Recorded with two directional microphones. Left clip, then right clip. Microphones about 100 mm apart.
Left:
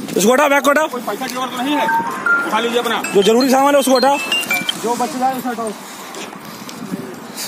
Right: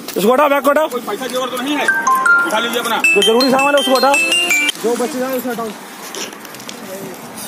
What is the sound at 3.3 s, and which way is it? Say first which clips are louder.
Speech: even; 35° left (ahead or behind).